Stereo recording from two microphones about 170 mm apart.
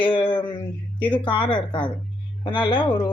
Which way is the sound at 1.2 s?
30° left (ahead or behind).